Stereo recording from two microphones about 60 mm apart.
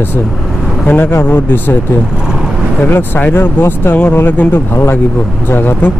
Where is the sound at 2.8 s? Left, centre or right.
Left.